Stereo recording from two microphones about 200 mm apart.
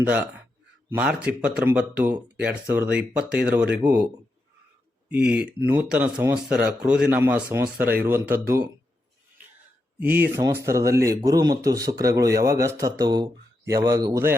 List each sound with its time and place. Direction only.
0.1 s speech: 10° right (ahead or behind)
10.0 s speech: 10° right (ahead or behind)